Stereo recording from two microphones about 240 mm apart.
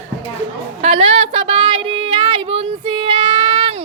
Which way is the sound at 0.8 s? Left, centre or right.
Right.